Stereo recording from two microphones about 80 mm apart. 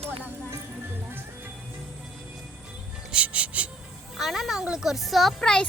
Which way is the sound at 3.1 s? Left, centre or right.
Centre.